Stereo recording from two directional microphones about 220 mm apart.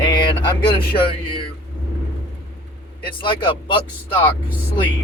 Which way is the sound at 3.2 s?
20° left (ahead or behind).